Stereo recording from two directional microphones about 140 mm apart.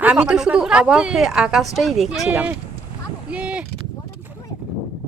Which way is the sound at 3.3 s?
10° right (ahead or behind).